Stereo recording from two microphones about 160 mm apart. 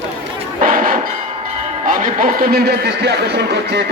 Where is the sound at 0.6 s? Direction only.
60° right (ahead or behind).